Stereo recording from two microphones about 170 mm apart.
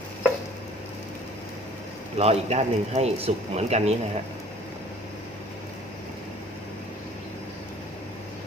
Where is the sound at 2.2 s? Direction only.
35° right (ahead or behind).